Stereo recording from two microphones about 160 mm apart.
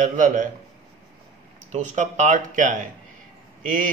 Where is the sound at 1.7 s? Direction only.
50° right (ahead or behind).